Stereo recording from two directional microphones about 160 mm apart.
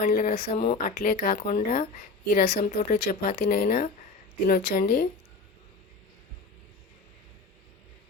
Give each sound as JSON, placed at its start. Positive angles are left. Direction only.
{"t": 0.0, "sound": "a woman's voice", "side_deg": 60}